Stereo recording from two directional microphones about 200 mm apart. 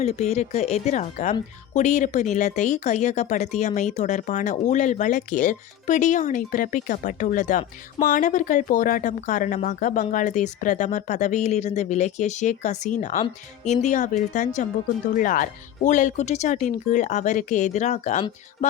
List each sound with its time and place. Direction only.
0.0 s speech: 30° left (ahead or behind)